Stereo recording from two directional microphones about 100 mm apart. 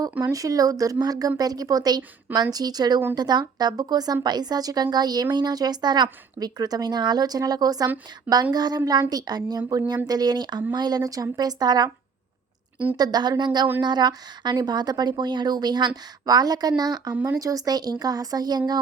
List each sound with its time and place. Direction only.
0.2 s a woman's voice: 35° right (ahead or behind)
13.0 s a woman's voice: 45° right (ahead or behind)